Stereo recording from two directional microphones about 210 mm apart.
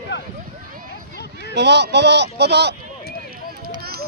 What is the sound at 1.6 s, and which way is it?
Speech, 55° right (ahead or behind).